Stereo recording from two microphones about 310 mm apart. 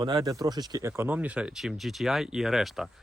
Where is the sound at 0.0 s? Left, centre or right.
Centre.